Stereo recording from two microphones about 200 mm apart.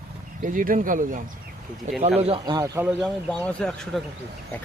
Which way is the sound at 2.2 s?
30° right (ahead or behind).